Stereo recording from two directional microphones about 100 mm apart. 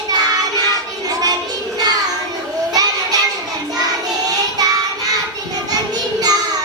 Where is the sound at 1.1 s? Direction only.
40° right (ahead or behind).